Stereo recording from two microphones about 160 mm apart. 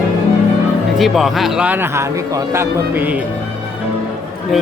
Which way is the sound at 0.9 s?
Centre (ahead or behind).